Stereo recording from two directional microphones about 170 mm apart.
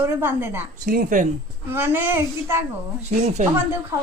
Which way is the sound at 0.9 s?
50° right (ahead or behind).